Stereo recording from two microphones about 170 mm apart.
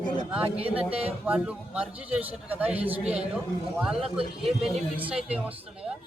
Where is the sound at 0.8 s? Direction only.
35° right (ahead or behind).